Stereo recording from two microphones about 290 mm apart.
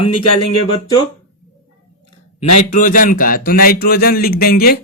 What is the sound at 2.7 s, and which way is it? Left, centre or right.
Speech, left.